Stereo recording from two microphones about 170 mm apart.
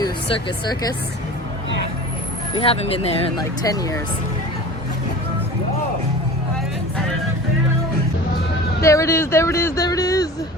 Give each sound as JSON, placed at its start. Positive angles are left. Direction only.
{"t": 0.0, "sound": "speech", "side_deg": 30}
{"t": 2.6, "sound": "speech", "side_deg": 35}
{"t": 3.6, "sound": "speech", "side_deg": 20}
{"t": 8.8, "sound": "speech", "side_deg": 15}